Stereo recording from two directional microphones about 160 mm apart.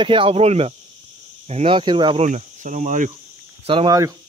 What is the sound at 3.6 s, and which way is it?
Speech, 35° right (ahead or behind).